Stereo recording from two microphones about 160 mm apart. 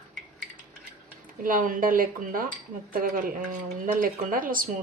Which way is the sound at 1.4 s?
60° right (ahead or behind).